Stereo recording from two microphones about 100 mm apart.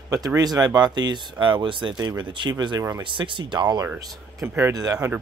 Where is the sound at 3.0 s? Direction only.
55° right (ahead or behind).